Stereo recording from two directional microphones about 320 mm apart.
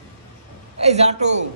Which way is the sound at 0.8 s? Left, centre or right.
Centre.